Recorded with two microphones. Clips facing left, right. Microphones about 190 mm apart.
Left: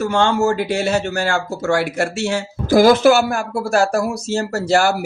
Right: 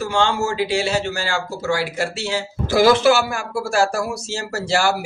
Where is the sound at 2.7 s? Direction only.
50° left (ahead or behind).